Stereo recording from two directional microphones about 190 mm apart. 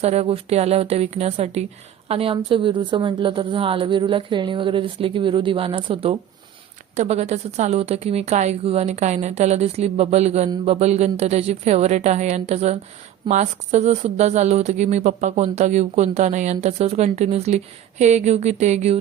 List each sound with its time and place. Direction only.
0.0 s a woman's voice: 35° right (ahead or behind)